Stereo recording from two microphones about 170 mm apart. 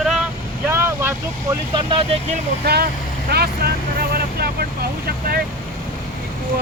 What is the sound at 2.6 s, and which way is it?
Speech, 65° right (ahead or behind).